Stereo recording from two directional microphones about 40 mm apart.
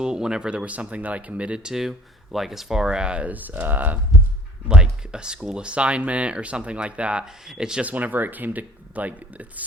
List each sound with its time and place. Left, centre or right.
0.0 s speech: centre
0.6 s speech: right
1.6 s speech: centre
3.2 s speech: right
4.7 s speech: right
7.4 s speech: centre
7.8 s speech: right